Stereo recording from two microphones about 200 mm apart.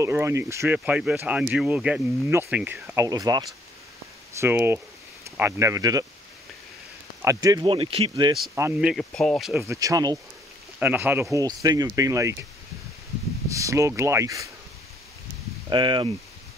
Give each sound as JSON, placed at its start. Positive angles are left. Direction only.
{"t": 0.0, "sound": "speech", "side_deg": -15}
{"t": 7.2, "sound": "speech", "side_deg": -15}
{"t": 8.5, "sound": "speech", "side_deg": -10}
{"t": 9.7, "sound": "speech", "side_deg": -15}
{"t": 13.5, "sound": "speech", "side_deg": -15}
{"t": 15.7, "sound": "speech", "side_deg": -25}